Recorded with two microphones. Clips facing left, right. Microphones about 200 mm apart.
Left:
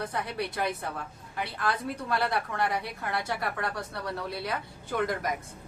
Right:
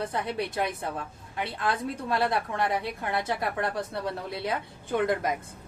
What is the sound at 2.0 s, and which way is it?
A woman's voice, 25° right (ahead or behind).